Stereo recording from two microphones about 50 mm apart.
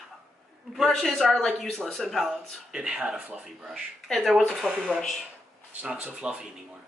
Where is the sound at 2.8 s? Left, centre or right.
Centre.